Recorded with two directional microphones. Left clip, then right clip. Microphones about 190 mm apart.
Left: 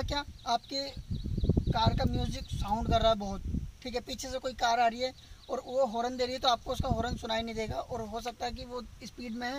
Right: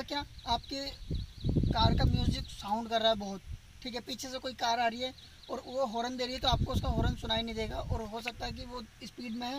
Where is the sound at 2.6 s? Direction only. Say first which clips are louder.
Left 2 dB; centre (ahead or behind).